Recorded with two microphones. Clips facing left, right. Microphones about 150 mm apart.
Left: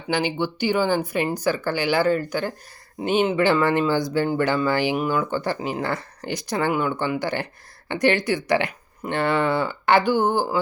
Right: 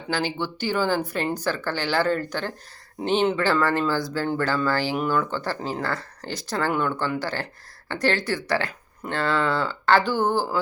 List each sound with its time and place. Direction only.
0.1 s speech: 15° left (ahead or behind)